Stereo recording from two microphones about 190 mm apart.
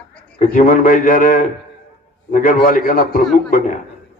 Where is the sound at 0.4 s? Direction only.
45° left (ahead or behind).